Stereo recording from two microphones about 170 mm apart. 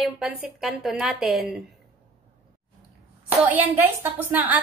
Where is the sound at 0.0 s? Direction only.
5° right (ahead or behind).